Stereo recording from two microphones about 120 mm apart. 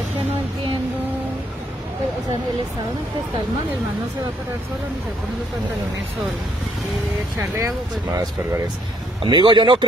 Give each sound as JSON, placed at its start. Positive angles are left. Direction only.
{"t": 7.3, "sound": "speech", "side_deg": -25}
{"t": 9.2, "sound": "speech", "side_deg": -40}